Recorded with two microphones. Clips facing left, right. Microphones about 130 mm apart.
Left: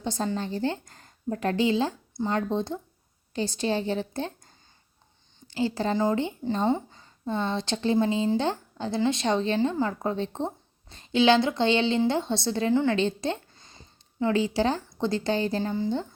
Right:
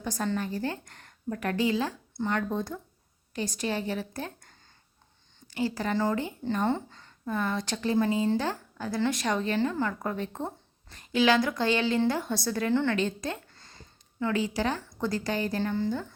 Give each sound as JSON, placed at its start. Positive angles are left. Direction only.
{"t": 0.0, "sound": "a woman's voice", "side_deg": 25}
{"t": 7.3, "sound": "a woman's voice", "side_deg": 25}
{"t": 12.7, "sound": "a woman's voice", "side_deg": 15}
{"t": 13.0, "sound": "a woman's voice", "side_deg": 30}